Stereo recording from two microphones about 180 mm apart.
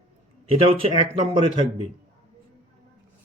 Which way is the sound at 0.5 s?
30° right (ahead or behind).